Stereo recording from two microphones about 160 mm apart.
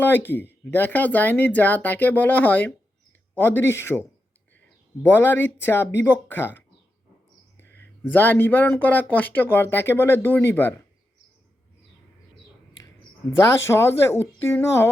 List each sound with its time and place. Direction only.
0.0 s speech: 15° left (ahead or behind)
5.0 s speech: 15° left (ahead or behind)
13.4 s speech: 15° left (ahead or behind)